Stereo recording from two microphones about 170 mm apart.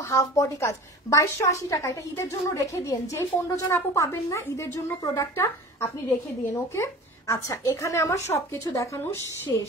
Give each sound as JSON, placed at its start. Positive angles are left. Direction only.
{"t": 0.1, "sound": "a woman's voice", "side_deg": 20}